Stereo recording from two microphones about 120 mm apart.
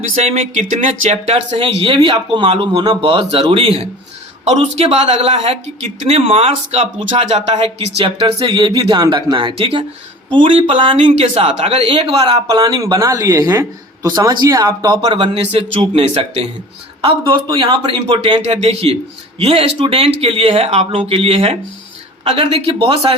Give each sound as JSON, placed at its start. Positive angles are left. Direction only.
{"t": 0.2, "sound": "speech", "side_deg": -65}
{"t": 7.6, "sound": "speech", "side_deg": -50}
{"t": 8.4, "sound": "speech", "side_deg": -35}
{"t": 10.9, "sound": "speech", "side_deg": -70}
{"t": 12.2, "sound": "speech", "side_deg": -35}
{"t": 15.4, "sound": "speech", "side_deg": -55}
{"t": 17.4, "sound": "speech", "side_deg": -40}
{"t": 18.4, "sound": "speech", "side_deg": -60}